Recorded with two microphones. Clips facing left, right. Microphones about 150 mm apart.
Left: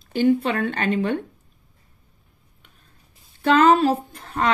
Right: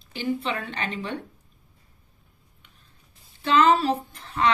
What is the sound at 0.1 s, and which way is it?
Speech, 50° left (ahead or behind).